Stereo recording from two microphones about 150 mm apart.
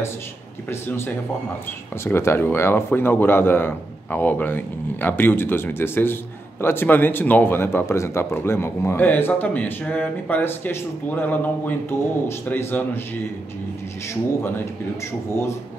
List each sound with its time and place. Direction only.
0.7 s speech: 15° left (ahead or behind)